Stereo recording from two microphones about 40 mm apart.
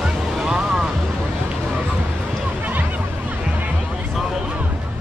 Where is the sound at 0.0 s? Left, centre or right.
Centre.